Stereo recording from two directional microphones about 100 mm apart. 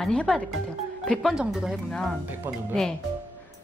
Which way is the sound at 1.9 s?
5° left (ahead or behind).